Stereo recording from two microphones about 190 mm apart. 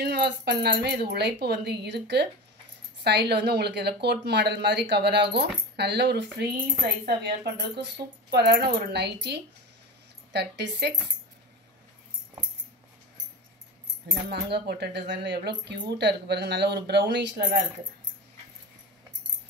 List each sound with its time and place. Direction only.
0.0 s speech: 60° right (ahead or behind)
14.3 s speech: 60° right (ahead or behind)